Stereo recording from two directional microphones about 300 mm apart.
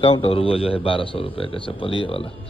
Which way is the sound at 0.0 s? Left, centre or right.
Centre.